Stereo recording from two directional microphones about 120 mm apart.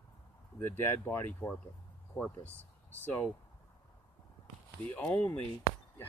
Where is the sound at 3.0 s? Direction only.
15° left (ahead or behind).